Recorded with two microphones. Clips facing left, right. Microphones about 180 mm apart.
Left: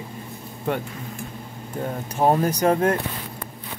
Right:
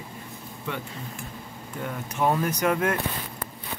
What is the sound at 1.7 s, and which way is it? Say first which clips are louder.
Speech: left 4 dB; 35° left (ahead or behind).